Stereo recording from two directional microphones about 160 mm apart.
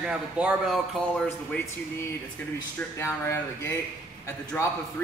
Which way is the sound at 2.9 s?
15° left (ahead or behind).